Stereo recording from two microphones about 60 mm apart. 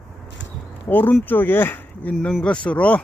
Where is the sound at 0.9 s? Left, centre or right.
Left.